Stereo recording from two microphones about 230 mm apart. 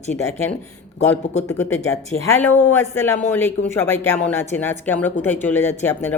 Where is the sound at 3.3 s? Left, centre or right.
Centre.